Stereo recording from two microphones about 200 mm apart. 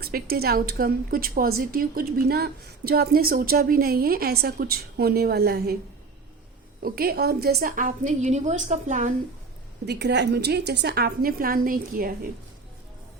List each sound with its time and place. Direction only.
0.0 s a woman's voice: 50° right (ahead or behind)
6.8 s a woman's voice: 50° right (ahead or behind)
9.8 s a woman's voice: 55° right (ahead or behind)